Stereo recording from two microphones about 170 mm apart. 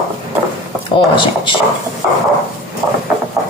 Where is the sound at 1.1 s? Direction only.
30° left (ahead or behind).